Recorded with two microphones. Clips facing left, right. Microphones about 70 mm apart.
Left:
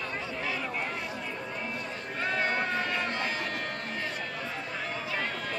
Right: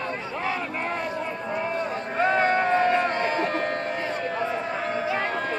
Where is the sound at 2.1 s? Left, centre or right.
Right.